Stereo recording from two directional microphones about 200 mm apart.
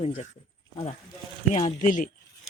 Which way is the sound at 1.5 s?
35° left (ahead or behind).